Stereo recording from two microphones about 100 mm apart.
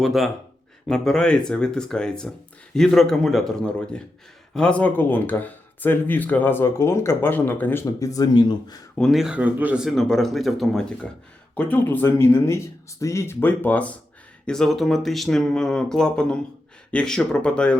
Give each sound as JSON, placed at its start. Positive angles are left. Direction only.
{"t": 0.0, "sound": "speech", "side_deg": 0}
{"t": 7.9, "sound": "speech", "side_deg": 35}
{"t": 9.0, "sound": "speech", "side_deg": 0}
{"t": 9.8, "sound": "speech", "side_deg": 5}